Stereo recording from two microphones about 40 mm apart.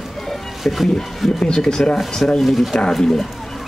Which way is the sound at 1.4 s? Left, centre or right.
Centre.